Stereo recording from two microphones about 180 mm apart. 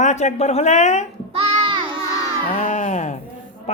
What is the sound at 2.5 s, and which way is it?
Speech, 40° left (ahead or behind).